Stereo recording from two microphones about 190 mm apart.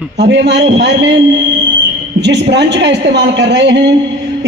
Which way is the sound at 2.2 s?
65° right (ahead or behind).